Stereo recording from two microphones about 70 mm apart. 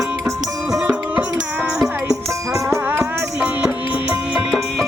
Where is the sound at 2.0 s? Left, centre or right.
Right.